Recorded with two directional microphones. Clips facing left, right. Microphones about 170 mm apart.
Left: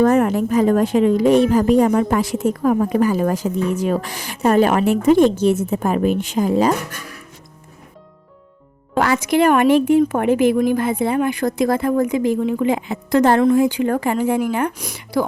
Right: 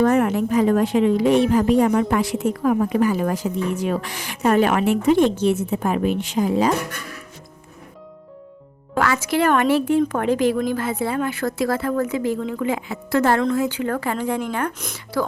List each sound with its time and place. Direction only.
0.0 s speech: 40° left (ahead or behind)
9.2 s speech: 15° left (ahead or behind)